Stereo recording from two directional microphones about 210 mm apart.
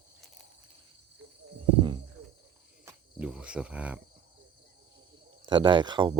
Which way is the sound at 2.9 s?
5° right (ahead or behind).